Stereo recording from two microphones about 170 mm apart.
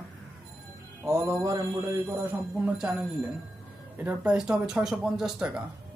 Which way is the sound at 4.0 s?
5° right (ahead or behind).